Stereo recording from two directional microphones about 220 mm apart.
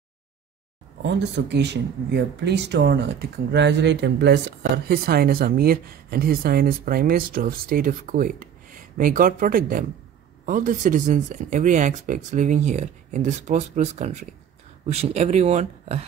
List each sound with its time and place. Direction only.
1.0 s speech: 50° right (ahead or behind); by 16.1 s 30° right (ahead or behind)